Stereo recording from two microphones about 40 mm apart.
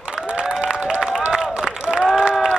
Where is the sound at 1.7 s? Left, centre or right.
Right.